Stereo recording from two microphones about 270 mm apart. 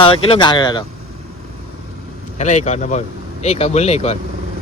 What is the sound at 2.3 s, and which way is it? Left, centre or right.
Speech, left.